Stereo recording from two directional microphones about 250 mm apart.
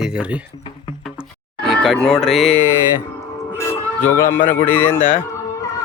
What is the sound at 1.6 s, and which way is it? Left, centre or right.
Music, centre.